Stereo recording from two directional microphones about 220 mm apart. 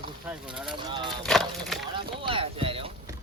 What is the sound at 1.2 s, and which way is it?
Speech, centre (ahead or behind).